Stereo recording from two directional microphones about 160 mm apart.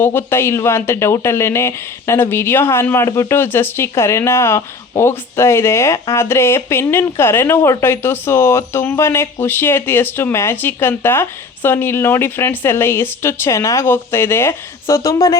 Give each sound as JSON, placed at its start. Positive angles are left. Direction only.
{"t": 0.0, "sound": "speech", "side_deg": 15}